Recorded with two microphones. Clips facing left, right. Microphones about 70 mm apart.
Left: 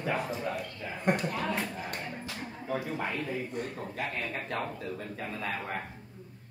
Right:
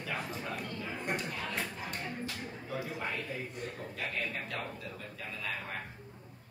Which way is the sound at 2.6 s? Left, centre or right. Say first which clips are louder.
Left 5 dB; left.